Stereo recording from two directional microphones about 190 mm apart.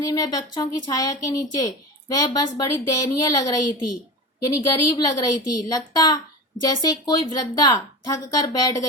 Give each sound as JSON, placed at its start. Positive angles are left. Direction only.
{"t": 0.0, "sound": "a woman's voice", "side_deg": 20}